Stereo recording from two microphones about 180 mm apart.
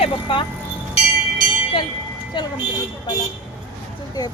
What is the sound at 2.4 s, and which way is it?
Speech, 25° left (ahead or behind).